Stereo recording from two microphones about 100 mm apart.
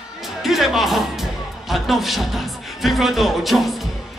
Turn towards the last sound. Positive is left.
turn(degrees=0)  # may be behind; listen again after turning